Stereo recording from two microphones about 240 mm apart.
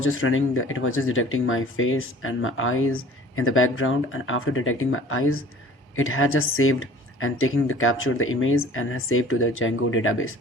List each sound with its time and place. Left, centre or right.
0.0 s speech: left